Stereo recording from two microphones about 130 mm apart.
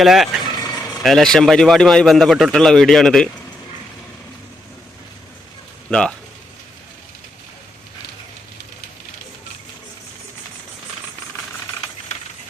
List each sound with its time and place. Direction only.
0.0 s a man's voice: centre (ahead or behind)
0.5 s vehicle: 30° left (ahead or behind)
1.0 s a man's voice: 5° left (ahead or behind)
5.9 s a man's voice: 5° left (ahead or behind)